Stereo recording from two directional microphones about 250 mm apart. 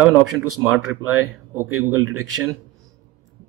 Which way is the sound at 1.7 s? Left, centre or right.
Right.